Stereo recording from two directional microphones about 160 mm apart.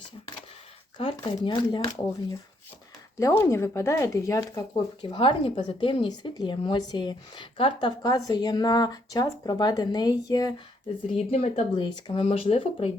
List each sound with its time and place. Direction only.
0.9 s speech: 35° left (ahead or behind)
3.2 s speech: 20° left (ahead or behind)
11.3 s speech: 40° left (ahead or behind)
11.7 s speech: 25° left (ahead or behind)